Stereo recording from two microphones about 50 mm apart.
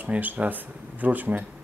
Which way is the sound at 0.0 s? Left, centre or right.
Right.